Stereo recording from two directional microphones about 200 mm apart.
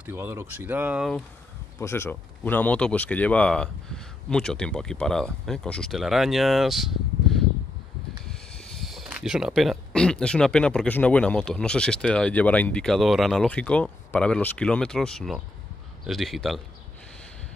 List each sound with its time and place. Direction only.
0.0 s speech: 10° right (ahead or behind)
1.8 s speech: 10° left (ahead or behind)